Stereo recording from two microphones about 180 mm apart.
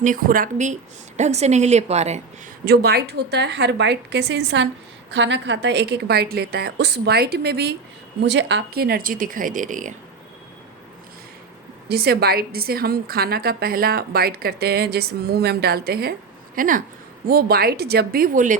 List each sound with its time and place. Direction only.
0.0 s a woman's voice: 50° right (ahead or behind)
2.6 s a woman's voice: 60° right (ahead or behind)
5.1 s a woman's voice: 85° right; by 7.7 s 65° right (ahead or behind)
8.2 s speech: 75° right (ahead or behind); by 9.9 s 45° right (ahead or behind)
11.9 s a woman's voice: 60° right (ahead or behind)
16.6 s a woman's voice: 50° right (ahead or behind)